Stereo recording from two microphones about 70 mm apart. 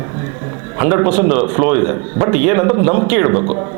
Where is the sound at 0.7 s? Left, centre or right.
Right.